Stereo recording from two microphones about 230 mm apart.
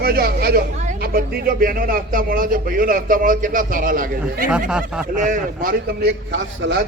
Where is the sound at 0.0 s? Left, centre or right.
Right.